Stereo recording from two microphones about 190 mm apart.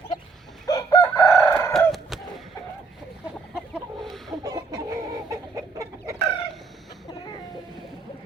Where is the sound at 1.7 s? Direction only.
Centre (ahead or behind).